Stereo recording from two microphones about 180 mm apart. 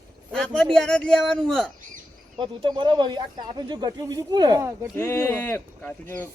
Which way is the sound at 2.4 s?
25° right (ahead or behind).